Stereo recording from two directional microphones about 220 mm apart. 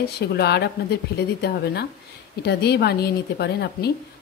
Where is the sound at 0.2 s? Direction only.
50° left (ahead or behind).